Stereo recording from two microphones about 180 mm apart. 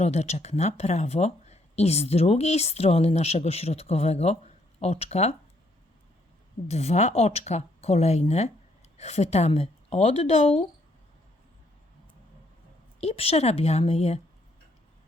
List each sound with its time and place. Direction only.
0.0 s speech: 35° left (ahead or behind)
6.7 s speech: 35° left (ahead or behind)
13.0 s speech: 35° left (ahead or behind)